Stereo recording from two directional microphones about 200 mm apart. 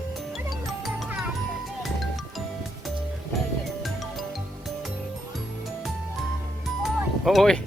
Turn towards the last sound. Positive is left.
turn(degrees=0)  # may be behind; listen again after turning